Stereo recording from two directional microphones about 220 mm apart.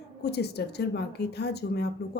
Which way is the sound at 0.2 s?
50° left (ahead or behind).